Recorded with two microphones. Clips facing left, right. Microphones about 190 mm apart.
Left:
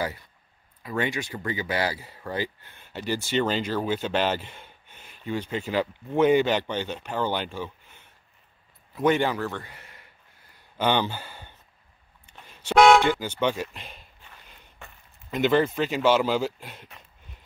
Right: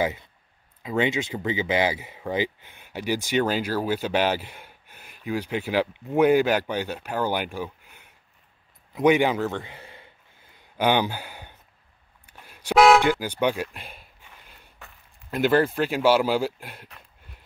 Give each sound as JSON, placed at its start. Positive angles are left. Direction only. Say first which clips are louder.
{"t": 0.8, "sound": "speech", "louder": "right 4 dB", "side_deg": -20}
{"t": 8.9, "sound": "a sound", "louder": "right 3 dB", "side_deg": -15}
{"t": 10.8, "sound": "speech", "louder": "right 2 dB", "side_deg": -10}
{"t": 12.3, "sound": "toot", "louder": "right 2 dB", "side_deg": -10}
{"t": 15.3, "sound": "speech", "louder": "right 1 dB", "side_deg": -5}